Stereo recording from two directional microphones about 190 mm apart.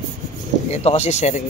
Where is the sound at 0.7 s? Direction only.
35° left (ahead or behind).